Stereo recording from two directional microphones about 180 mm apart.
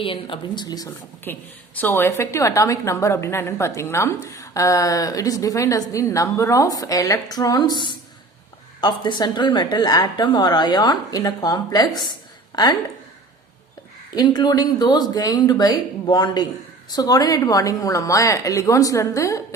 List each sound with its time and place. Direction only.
0.0 s a woman's voice: 30° left (ahead or behind)
14.2 s a woman's voice: 20° left (ahead or behind)